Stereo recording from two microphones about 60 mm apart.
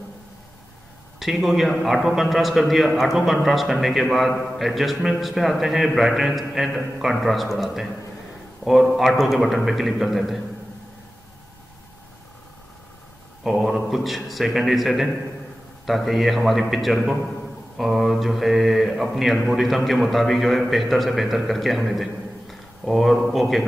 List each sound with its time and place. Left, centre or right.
1.2 s speech: centre
13.4 s a man's voice: centre